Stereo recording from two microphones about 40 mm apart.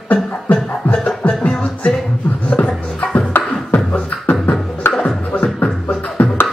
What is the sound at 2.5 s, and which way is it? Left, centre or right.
Beatboxing, left.